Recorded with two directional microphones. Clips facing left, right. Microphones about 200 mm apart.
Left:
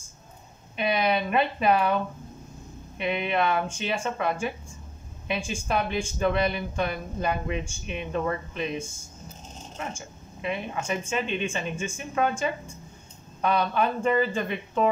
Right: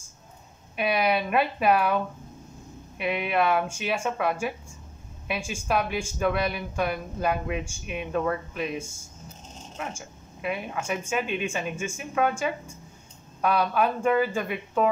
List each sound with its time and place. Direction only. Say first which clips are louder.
0.7 s speech: even; 5° right (ahead or behind)
3.0 s speech: right 1 dB; 5° right (ahead or behind)